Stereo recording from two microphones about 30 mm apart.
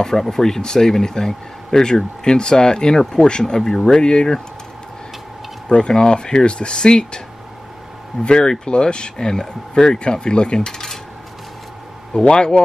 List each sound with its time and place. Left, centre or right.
0.0 s speech: centre; by 4.4 s left
5.7 s speech: left
9.9 s speech: left
12.1 s speech: left